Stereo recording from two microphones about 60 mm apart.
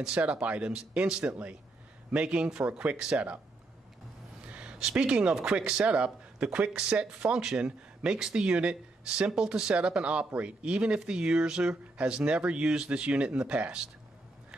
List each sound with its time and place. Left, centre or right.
0.2 s speech: centre
4.5 s a sound: centre
4.7 s speech: centre